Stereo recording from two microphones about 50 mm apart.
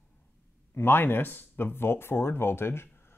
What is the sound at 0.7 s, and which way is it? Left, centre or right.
Speech, left.